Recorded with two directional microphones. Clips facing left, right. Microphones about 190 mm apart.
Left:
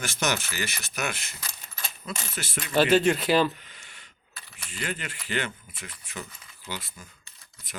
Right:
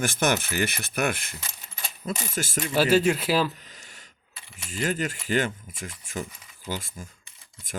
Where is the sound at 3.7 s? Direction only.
40° right (ahead or behind).